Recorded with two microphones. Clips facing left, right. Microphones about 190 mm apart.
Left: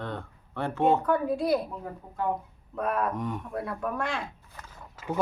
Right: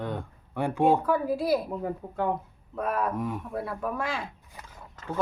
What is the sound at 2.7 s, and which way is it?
A woman's voice, centre (ahead or behind).